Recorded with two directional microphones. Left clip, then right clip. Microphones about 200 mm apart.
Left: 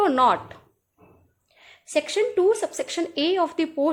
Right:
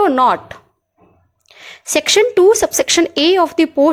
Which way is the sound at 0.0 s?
25° right (ahead or behind).